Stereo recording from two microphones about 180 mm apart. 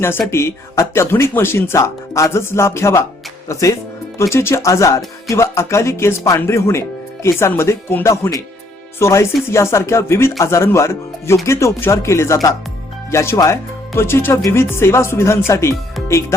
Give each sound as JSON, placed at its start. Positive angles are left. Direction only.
{"t": 0.3, "sound": "speech", "side_deg": 15}